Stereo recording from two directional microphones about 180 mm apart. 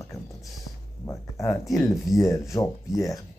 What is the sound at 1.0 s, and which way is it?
Speech, 20° left (ahead or behind).